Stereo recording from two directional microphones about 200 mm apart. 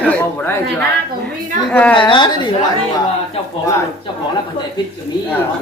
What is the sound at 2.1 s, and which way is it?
Speech, 20° left (ahead or behind).